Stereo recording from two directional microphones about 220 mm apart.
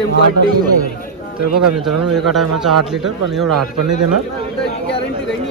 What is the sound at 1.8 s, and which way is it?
Speech, centre (ahead or behind).